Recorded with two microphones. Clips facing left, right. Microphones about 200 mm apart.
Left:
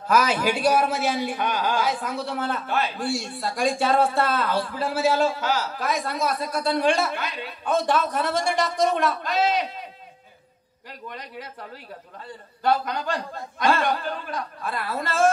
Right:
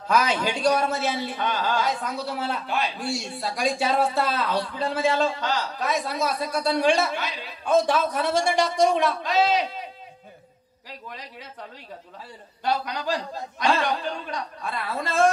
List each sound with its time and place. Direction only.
0.1 s a man's voice: 5° left (ahead or behind)
1.9 s a man's voice: centre (ahead or behind)
10.9 s a man's voice: centre (ahead or behind)
12.8 s a man's voice: centre (ahead or behind)